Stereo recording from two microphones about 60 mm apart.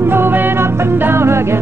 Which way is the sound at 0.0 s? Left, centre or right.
Right.